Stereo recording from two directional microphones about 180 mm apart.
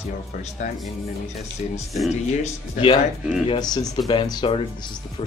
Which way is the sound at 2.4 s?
30° left (ahead or behind).